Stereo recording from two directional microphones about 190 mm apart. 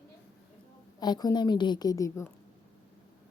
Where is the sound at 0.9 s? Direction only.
20° left (ahead or behind).